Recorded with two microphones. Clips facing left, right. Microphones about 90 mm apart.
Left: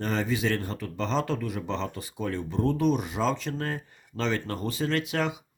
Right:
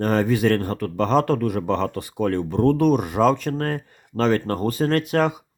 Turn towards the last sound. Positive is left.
turn(degrees=-45)  # may be behind; listen again after turning